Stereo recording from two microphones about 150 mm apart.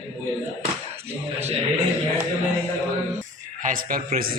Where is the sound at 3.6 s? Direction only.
65° right (ahead or behind).